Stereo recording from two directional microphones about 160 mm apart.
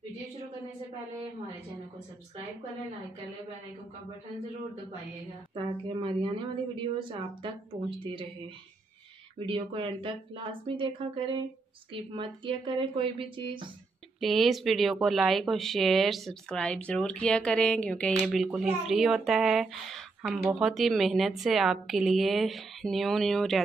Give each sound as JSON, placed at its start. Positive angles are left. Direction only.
{"t": 5.5, "sound": "a woman's voice", "side_deg": -30}
{"t": 9.5, "sound": "a woman's voice", "side_deg": -35}
{"t": 14.2, "sound": "speech", "side_deg": 0}